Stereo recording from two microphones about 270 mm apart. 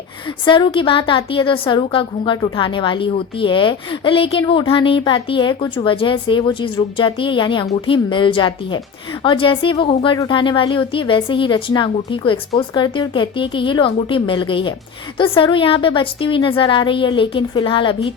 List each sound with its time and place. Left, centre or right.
0.4 s a woman's voice: centre